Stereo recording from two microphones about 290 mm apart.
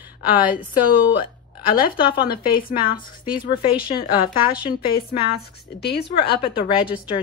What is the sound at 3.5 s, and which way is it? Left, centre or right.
A woman's voice, centre.